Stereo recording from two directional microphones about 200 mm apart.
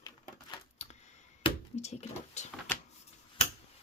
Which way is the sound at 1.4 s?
30° left (ahead or behind).